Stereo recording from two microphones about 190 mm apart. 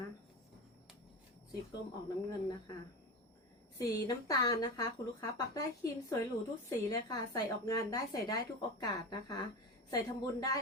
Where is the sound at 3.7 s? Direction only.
15° left (ahead or behind).